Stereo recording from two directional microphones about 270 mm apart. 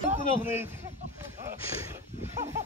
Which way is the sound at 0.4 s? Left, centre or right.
Centre.